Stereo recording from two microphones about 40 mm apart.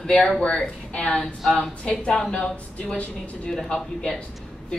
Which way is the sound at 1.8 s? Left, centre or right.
Left.